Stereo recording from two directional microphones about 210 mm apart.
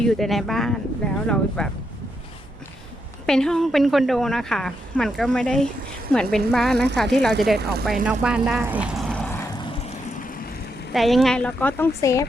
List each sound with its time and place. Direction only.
0.0 s speech: centre (ahead or behind)
3.2 s speech: 5° left (ahead or behind)
10.9 s speech: centre (ahead or behind)